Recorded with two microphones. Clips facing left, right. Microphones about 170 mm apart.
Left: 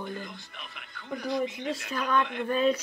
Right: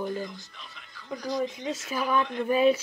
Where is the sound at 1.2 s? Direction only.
25° left (ahead or behind).